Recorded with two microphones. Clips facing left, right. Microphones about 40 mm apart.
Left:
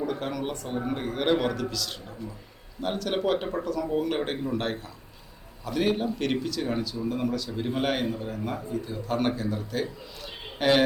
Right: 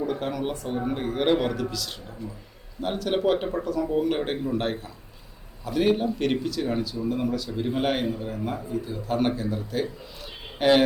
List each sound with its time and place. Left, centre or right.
0.0 s speech: centre